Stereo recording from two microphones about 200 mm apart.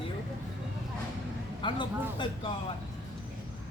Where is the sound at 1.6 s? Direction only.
25° left (ahead or behind).